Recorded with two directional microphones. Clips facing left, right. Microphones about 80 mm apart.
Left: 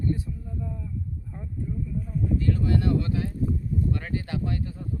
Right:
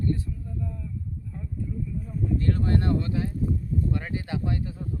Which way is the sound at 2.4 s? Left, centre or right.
Right.